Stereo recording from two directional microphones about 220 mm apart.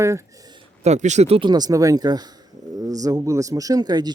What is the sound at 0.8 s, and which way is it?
Speech, 30° right (ahead or behind).